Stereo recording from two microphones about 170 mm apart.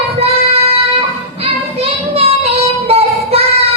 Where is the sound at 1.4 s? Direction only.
35° right (ahead or behind).